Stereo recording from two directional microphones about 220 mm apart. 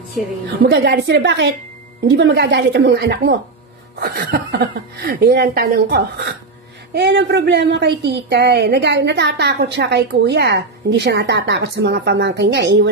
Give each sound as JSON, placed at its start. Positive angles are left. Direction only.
{"t": 0.7, "sound": "a woman's voice", "side_deg": -55}